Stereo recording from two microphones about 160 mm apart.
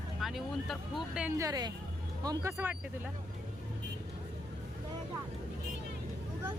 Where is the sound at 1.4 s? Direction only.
25° right (ahead or behind).